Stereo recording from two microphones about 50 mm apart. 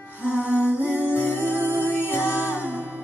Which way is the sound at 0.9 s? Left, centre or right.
Right.